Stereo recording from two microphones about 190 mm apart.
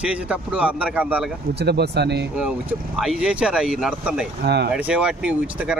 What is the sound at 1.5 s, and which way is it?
Speech, 60° right (ahead or behind).